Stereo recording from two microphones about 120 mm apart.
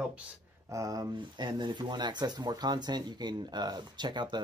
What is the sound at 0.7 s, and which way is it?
Speech, 30° right (ahead or behind).